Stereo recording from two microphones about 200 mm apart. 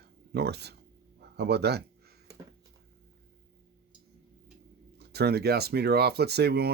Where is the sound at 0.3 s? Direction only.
55° right (ahead or behind).